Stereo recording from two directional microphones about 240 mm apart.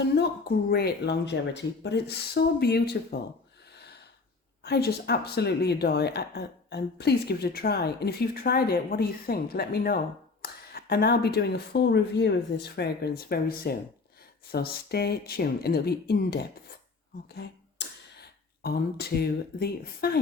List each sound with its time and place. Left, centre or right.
0.0 s speech: left
4.6 s speech: left